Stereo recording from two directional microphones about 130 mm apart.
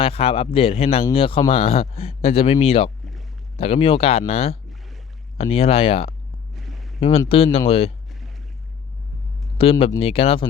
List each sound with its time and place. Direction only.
0.0 s speech: 50° left (ahead or behind)
6.6 s a sound: centre (ahead or behind)
7.3 s speech: 45° left (ahead or behind)
9.6 s speech: 45° left (ahead or behind)